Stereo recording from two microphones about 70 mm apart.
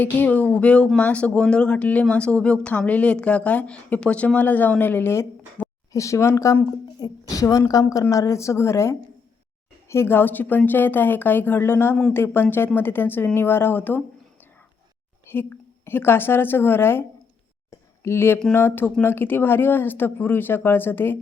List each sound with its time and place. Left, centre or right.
0.0 s speech: left
5.6 s a sound: left
5.9 s a woman's voice: left
15.3 s a woman's voice: left
17.7 s a sound: left
18.5 s speech: left